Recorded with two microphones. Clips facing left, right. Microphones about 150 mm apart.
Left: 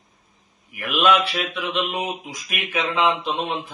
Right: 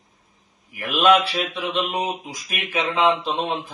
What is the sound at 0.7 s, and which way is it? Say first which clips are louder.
Speech: right 2 dB; 35° right (ahead or behind).